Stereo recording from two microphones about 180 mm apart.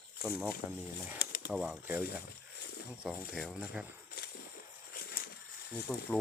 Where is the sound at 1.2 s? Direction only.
60° left (ahead or behind).